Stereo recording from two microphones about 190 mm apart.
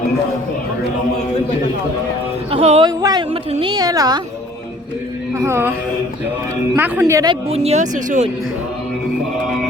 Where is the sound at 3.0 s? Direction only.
20° right (ahead or behind).